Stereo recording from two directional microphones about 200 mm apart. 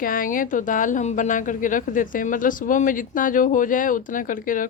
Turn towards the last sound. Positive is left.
turn(degrees=40)  # may be behind; listen again after turning